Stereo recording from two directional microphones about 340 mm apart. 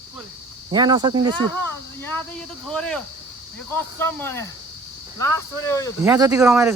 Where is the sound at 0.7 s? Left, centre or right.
Centre.